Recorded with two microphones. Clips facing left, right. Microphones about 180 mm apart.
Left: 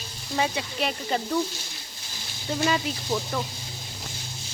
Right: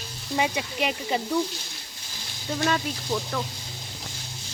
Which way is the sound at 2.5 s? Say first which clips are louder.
Left 1 dB; 5° left (ahead or behind).